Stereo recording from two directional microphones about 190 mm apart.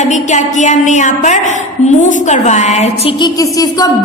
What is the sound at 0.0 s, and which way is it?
A woman's voice, 40° left (ahead or behind).